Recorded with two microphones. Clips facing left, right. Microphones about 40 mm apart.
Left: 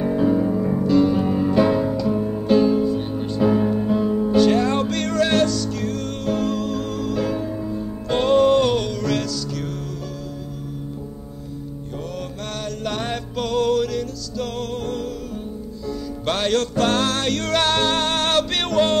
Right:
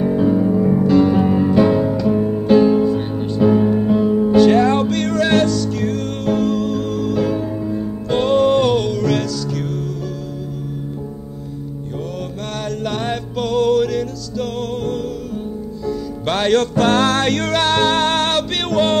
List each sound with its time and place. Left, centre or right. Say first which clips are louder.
0.0 s music: right 3 dB; centre
0.8 s music: right 2 dB; right
1.5 s music: right 1 dB; centre
2.0 s music: right 5 dB; right
3.2 s music: right 4 dB; centre
3.7 s music: right 5 dB; right
6.3 s music: right 5 dB; centre
12.8 s music: right 2 dB; centre
13.7 s music: right 5 dB; right
16.3 s music: right 5 dB; right
17.0 s music: right 5 dB; right
17.5 s music: right 1 dB; right
18.3 s music: right 1 dB; centre